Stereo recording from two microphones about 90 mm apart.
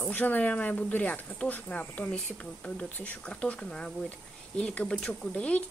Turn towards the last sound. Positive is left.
turn(degrees=15)  # may be behind; listen again after turning